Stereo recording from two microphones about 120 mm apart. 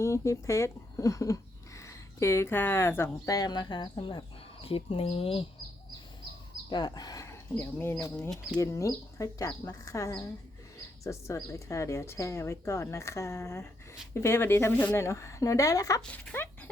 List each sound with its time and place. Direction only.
0.0 s speech: 25° left (ahead or behind); by 5.5 s 50° left (ahead or behind)
6.7 s speech: 35° left (ahead or behind)
7.5 s a woman's voice: 20° left (ahead or behind)
16.0 s speech: 15° left (ahead or behind)